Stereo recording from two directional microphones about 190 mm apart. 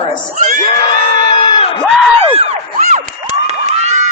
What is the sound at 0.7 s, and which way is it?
Crowd, 35° left (ahead or behind).